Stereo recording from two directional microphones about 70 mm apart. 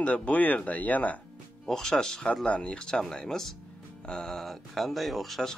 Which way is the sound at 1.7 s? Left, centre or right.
Centre.